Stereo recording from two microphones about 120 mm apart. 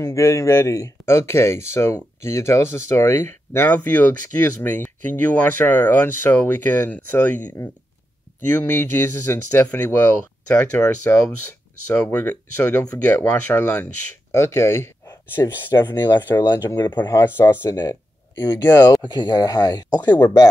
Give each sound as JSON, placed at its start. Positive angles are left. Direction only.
{"t": 0.0, "sound": "speech", "side_deg": 25}
{"t": 15.8, "sound": "speech", "side_deg": 35}
{"t": 17.2, "sound": "speech", "side_deg": 20}
{"t": 17.6, "sound": "speech", "side_deg": 35}
{"t": 18.6, "sound": "speech", "side_deg": 20}
{"t": 19.0, "sound": "speech", "side_deg": 35}